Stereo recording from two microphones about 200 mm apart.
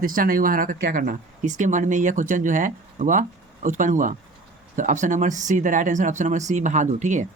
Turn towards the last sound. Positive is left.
turn(degrees=-40)  # may be behind; listen again after turning